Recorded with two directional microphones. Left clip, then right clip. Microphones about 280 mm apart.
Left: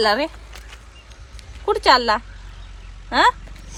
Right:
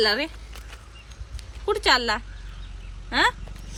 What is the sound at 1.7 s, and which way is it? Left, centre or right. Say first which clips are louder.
Speech: left 6 dB; centre.